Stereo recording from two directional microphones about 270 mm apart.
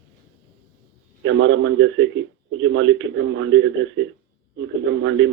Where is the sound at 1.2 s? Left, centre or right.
Right.